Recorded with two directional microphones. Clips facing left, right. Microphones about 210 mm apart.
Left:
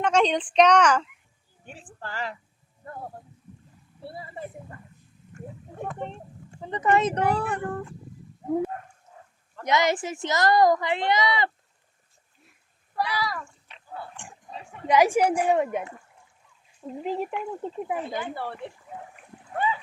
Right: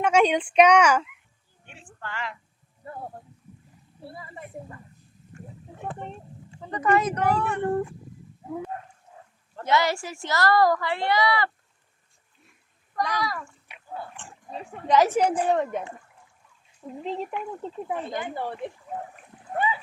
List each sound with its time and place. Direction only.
0.0 s speech: 10° right (ahead or behind)
2.0 s a woman's voice: 35° left (ahead or behind)
4.1 s speech: 30° left (ahead or behind)
6.6 s speech: 25° left (ahead or behind)
9.6 s speech: 20° left (ahead or behind)
13.0 s speech: 5° left (ahead or behind)
13.7 s a sound: 10° right (ahead or behind)
14.2 s speech: 15° left (ahead or behind)
17.0 s speech: 10° left (ahead or behind)
18.3 s speech: 15° right (ahead or behind)